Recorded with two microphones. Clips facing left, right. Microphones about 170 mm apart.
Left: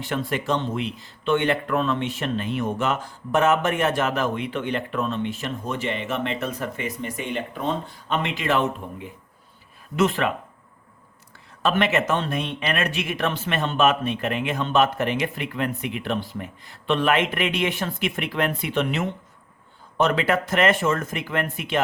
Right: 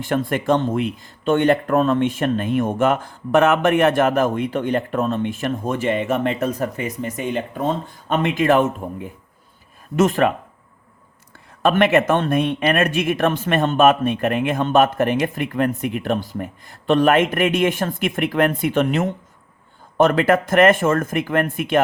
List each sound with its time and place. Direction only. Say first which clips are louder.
0.0 s speech: right 5 dB; 50° right (ahead or behind)
11.6 s speech: right 6 dB; 55° right (ahead or behind)